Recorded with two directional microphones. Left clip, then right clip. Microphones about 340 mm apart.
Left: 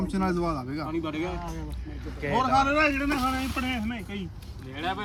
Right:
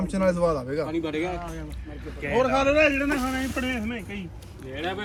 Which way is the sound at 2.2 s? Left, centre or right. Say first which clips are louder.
Right 1 dB; left.